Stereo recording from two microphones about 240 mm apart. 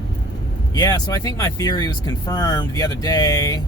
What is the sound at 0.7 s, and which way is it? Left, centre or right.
Speech, centre.